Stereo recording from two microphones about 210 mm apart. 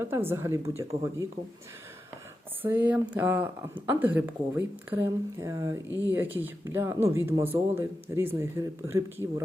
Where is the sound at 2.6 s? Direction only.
10° right (ahead or behind).